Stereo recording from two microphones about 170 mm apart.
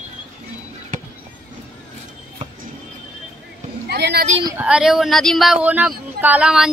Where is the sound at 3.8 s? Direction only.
75° right (ahead or behind).